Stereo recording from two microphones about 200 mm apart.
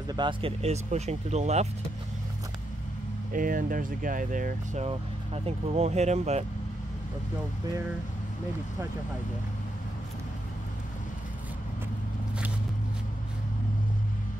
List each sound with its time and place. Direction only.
0.1 s speech: 25° right (ahead or behind)
3.3 s speech: 40° right (ahead or behind)
4.8 s speech: 30° right (ahead or behind)